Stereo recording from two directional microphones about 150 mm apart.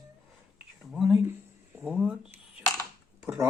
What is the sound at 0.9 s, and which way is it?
Speech, 5° right (ahead or behind).